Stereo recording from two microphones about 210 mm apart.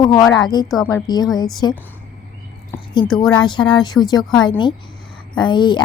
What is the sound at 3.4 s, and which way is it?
Speech, 20° left (ahead or behind).